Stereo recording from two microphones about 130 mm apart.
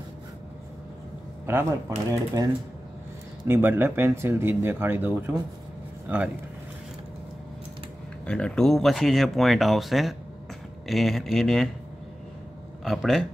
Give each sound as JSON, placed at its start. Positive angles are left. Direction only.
{"t": 1.4, "sound": "speech", "side_deg": -20}
{"t": 3.4, "sound": "speech", "side_deg": -15}
{"t": 8.3, "sound": "speech", "side_deg": 5}
{"t": 12.8, "sound": "speech", "side_deg": 0}